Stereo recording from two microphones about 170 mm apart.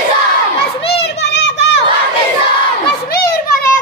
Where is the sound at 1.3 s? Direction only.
90° left.